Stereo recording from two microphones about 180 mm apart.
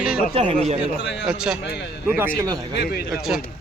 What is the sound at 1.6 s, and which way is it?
Speech, 65° left (ahead or behind).